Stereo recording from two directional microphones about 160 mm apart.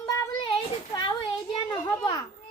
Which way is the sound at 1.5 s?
30° left (ahead or behind).